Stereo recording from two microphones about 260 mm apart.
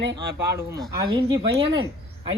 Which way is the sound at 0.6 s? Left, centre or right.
Centre.